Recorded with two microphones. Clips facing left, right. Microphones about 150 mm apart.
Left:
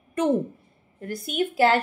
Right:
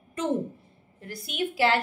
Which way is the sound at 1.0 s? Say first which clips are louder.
Left 5 dB; 50° left (ahead or behind).